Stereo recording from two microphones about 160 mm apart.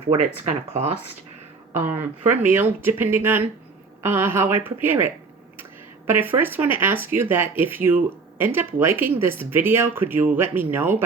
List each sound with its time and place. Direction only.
0.4 s speech: 40° right (ahead or behind)
1.7 s speech: 15° right (ahead or behind)